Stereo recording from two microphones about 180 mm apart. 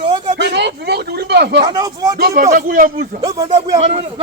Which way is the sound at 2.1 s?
60° right (ahead or behind).